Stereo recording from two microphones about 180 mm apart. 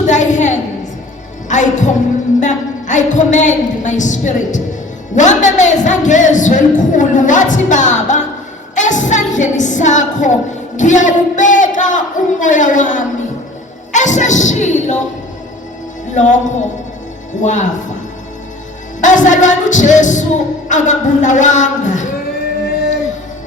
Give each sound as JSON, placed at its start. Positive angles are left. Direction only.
{"t": 0.1, "sound": "a sound", "side_deg": 40}
{"t": 1.5, "sound": "speech", "side_deg": 45}
{"t": 8.7, "sound": "a sound", "side_deg": 45}
{"t": 10.8, "sound": "speech", "side_deg": 45}
{"t": 16.1, "sound": "speech", "side_deg": 45}
{"t": 19.0, "sound": "speech", "side_deg": 45}